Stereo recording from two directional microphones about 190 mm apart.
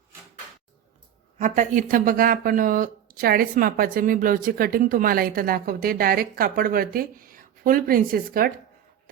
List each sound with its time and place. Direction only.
1.4 s speech: 40° right (ahead or behind)